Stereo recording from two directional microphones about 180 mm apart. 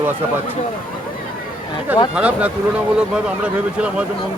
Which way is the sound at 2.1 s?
5° right (ahead or behind).